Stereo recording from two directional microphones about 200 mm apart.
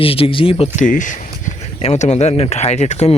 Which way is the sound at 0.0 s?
25° left (ahead or behind).